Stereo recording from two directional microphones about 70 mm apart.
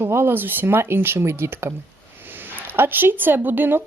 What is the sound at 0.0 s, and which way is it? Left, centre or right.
Speech, right.